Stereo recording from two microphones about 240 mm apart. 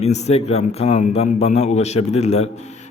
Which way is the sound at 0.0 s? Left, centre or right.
Left.